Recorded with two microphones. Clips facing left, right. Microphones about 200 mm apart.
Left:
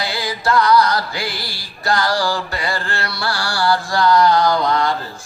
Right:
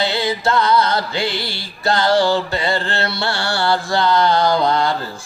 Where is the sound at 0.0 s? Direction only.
25° right (ahead or behind).